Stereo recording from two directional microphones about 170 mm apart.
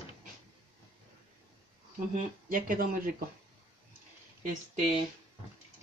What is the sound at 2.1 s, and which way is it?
Speech, 55° right (ahead or behind).